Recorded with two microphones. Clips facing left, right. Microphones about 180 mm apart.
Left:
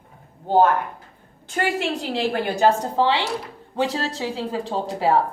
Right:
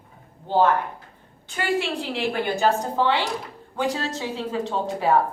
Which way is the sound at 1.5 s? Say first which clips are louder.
Left 1 dB; 40° left (ahead or behind).